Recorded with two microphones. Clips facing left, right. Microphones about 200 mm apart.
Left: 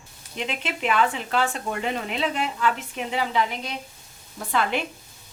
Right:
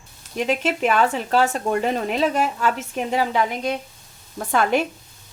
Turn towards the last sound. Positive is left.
turn(degrees=-45)  # may be behind; listen again after turning